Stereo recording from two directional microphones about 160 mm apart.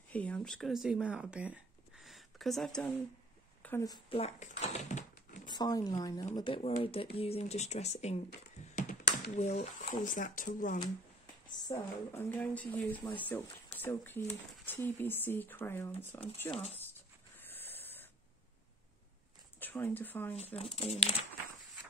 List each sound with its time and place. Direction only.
0.1 s speech: 5° left (ahead or behind)
3.6 s speech: 20° left (ahead or behind)
4.1 s a sound: 40° left (ahead or behind)
5.5 s speech: 25° left (ahead or behind); by 10.8 s 55° left (ahead or behind)
11.7 s speech: 20° left (ahead or behind)
16.4 s speech: 35° left (ahead or behind)
17.5 s a sound: 10° left (ahead or behind)
19.6 s speech: 10° left (ahead or behind)
20.5 s speech: 40° left (ahead or behind)